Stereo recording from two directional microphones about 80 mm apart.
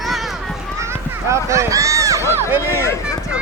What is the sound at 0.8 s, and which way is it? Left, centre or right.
Run, right.